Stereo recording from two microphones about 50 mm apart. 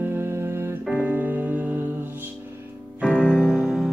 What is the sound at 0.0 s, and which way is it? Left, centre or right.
Music, right.